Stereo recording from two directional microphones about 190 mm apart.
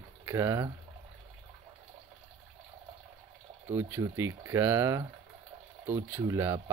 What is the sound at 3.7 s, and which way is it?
Speech, 15° right (ahead or behind).